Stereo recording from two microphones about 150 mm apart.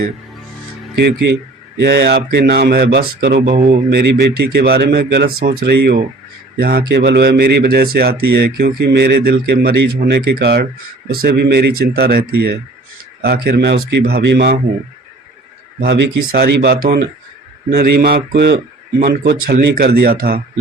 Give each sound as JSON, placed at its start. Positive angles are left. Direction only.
{"t": 1.8, "sound": "speech", "side_deg": -90}
{"t": 16.3, "sound": "speech", "side_deg": -90}